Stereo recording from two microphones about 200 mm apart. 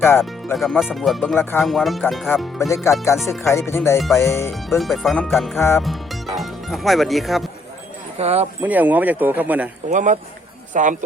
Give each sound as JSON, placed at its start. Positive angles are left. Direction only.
{"t": 0.5, "sound": "speech", "side_deg": 0}
{"t": 2.6, "sound": "speech", "side_deg": 15}
{"t": 4.8, "sound": "speech", "side_deg": 0}
{"t": 5.5, "sound": "speech", "side_deg": 10}
{"t": 5.8, "sound": "speech", "side_deg": 0}
{"t": 8.2, "sound": "speech", "side_deg": -30}
{"t": 8.6, "sound": "speech", "side_deg": -10}
{"t": 9.9, "sound": "speech", "side_deg": -40}